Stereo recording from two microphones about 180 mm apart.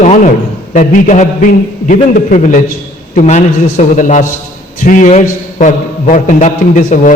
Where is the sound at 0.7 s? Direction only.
45° left (ahead or behind).